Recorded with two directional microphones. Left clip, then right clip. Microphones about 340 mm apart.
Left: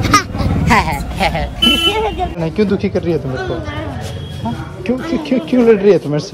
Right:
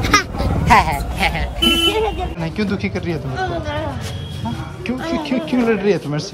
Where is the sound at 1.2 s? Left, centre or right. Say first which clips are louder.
Left 4 dB; centre.